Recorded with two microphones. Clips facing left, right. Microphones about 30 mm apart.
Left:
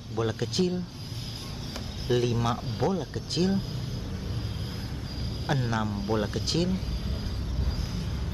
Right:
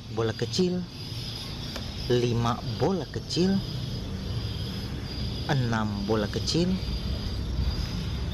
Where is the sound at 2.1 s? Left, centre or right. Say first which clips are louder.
Even; centre.